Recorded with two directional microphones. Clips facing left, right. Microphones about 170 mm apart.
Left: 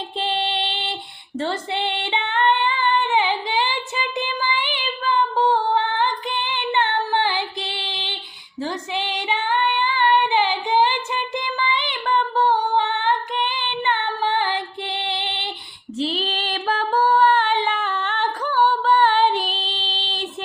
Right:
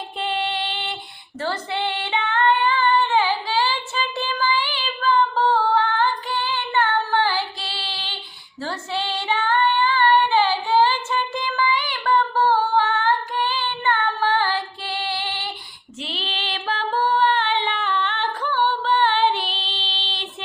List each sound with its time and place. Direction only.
0.2 s child singing: 25° left (ahead or behind)
1.4 s female singing: 25° left (ahead or behind)
16.0 s female singing: 40° left (ahead or behind)